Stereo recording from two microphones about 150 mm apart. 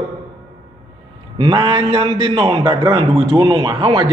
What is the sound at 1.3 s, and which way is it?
A man's voice, 30° right (ahead or behind).